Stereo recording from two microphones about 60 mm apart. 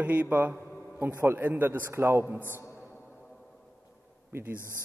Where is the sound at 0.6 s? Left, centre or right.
Left.